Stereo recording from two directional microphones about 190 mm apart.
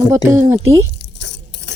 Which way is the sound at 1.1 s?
70° left (ahead or behind).